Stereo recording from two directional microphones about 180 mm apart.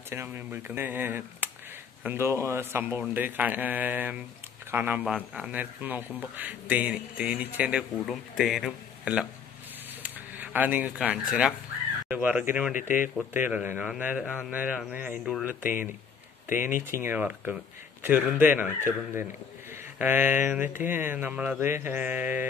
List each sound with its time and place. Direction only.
0.1 s a man's voice: 10° right (ahead or behind)
10.0 s a sound: 10° right (ahead or behind)
12.1 s a man's voice: 10° right (ahead or behind)
12.7 s speech: 45° left (ahead or behind)
13.3 s a man's voice: 10° right (ahead or behind)
16.4 s speech: 45° left (ahead or behind)
16.8 s a man's voice: 15° right (ahead or behind)
20.0 s a man's voice: 10° right (ahead or behind)